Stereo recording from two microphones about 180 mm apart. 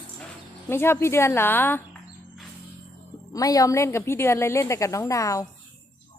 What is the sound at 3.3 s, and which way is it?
A woman's voice, 20° left (ahead or behind).